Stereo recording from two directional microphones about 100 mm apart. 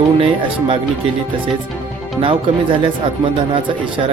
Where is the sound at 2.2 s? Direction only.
60° right (ahead or behind).